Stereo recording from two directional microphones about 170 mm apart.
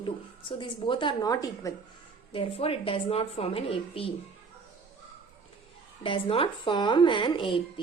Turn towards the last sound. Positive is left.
turn(degrees=30)  # may be behind; listen again after turning